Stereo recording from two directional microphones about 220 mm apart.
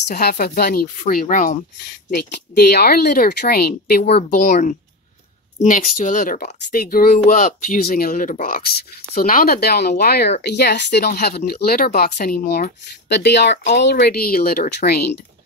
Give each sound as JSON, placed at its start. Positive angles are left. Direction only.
{"t": 0.1, "sound": "speech", "side_deg": 45}
{"t": 2.0, "sound": "speech", "side_deg": 45}
{"t": 4.2, "sound": "speech", "side_deg": 35}